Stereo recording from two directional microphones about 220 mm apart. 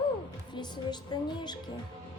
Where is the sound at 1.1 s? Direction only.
20° left (ahead or behind).